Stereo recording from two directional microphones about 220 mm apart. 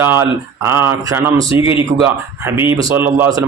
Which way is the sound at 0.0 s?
10° right (ahead or behind).